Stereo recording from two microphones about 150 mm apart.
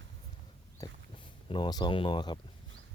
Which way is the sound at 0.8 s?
20° left (ahead or behind).